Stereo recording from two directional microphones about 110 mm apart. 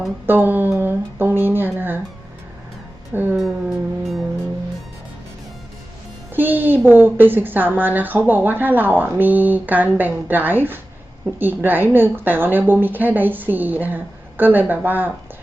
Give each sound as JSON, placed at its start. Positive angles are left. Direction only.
{"t": 0.3, "sound": "speech", "side_deg": -15}
{"t": 3.3, "sound": "music", "side_deg": 0}
{"t": 6.3, "sound": "a woman's voice", "side_deg": -20}